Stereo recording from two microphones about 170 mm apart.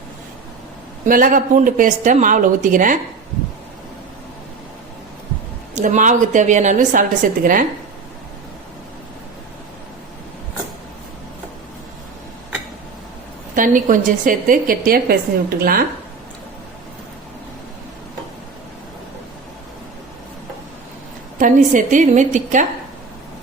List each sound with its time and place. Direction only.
1.0 s speech: 55° right (ahead or behind)
5.7 s speech: 45° right (ahead or behind)
13.6 s a woman's voice: 50° right (ahead or behind)
21.3 s speech: 50° right (ahead or behind)